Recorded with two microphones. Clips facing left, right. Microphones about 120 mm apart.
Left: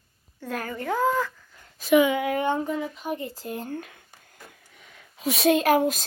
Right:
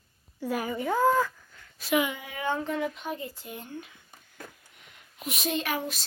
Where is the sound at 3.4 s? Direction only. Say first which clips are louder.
Left 7 dB; 40° left (ahead or behind); by 4.0 s 55° left (ahead or behind).